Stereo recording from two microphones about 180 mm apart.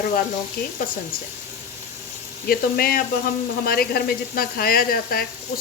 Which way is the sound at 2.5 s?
55° left (ahead or behind).